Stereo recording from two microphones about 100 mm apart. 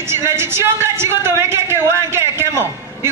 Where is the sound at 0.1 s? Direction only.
25° right (ahead or behind).